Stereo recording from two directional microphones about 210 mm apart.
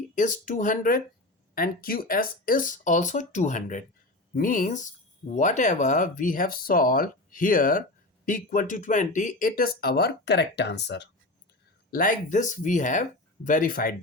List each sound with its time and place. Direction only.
0.2 s speech: 40° left (ahead or behind); by 11.1 s 55° left (ahead or behind)
11.9 s speech: 40° left (ahead or behind)